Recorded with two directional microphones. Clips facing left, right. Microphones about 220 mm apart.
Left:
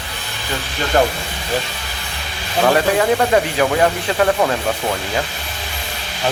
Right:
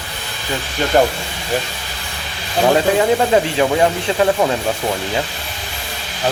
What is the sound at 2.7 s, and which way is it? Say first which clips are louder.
Speech: right 1 dB; 15° right (ahead or behind).